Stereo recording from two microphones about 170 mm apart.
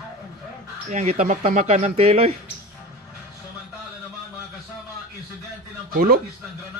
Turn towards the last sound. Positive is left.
turn(degrees=-65)  # may be behind; listen again after turning